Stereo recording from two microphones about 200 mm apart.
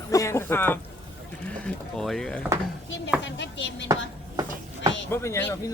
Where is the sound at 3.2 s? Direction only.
65° left (ahead or behind).